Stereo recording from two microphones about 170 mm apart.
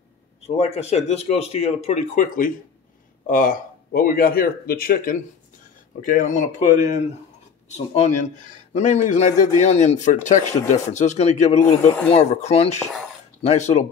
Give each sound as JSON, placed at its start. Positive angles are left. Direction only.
{"t": 0.6, "sound": "speech", "side_deg": 40}